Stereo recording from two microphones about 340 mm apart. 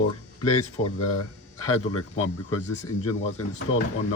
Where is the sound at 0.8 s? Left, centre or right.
Centre.